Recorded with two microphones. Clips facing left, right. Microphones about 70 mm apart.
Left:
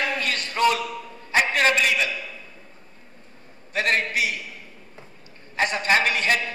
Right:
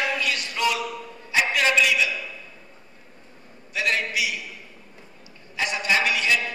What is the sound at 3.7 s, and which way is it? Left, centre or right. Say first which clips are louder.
Speech: left 2 dB; left.